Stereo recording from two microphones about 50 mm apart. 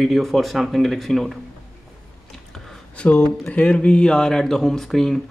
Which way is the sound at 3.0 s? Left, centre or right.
Left.